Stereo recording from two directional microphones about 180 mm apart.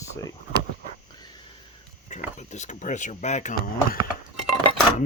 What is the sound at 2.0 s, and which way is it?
Speech, 40° left (ahead or behind).